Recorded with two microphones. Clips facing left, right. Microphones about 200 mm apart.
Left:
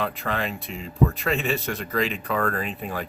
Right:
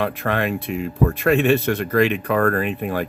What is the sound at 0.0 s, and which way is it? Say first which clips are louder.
Speech: right 6 dB; 60° right (ahead or behind).